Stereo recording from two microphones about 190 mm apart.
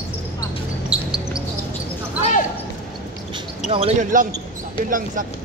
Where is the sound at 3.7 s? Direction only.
30° right (ahead or behind).